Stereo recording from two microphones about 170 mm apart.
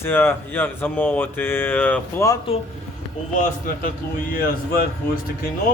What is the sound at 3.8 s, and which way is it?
Speech, 60° left (ahead or behind).